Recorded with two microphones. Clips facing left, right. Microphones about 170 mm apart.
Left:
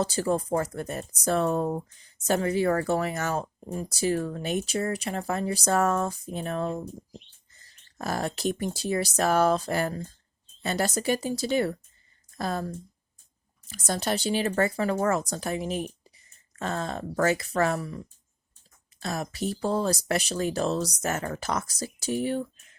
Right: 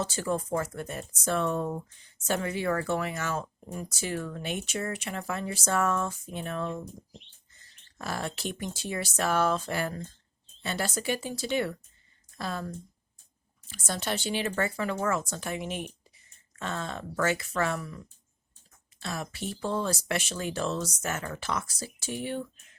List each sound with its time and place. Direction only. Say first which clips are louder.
0.0 s speech: left 4 dB; 35° left (ahead or behind)